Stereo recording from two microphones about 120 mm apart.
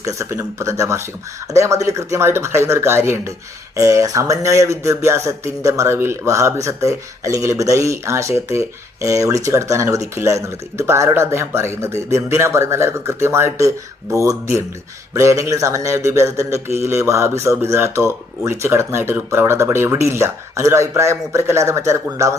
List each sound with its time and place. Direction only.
0.0 s speech: 25° right (ahead or behind)